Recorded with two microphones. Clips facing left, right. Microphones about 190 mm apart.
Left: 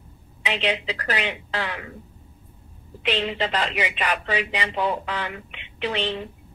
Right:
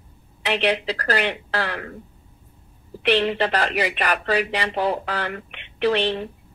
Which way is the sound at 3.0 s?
65° right (ahead or behind).